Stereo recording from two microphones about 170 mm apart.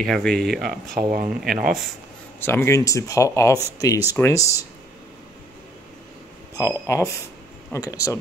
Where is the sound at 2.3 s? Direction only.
15° left (ahead or behind).